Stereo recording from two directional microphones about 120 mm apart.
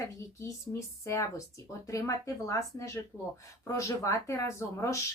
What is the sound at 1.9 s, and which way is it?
Speech, 25° left (ahead or behind).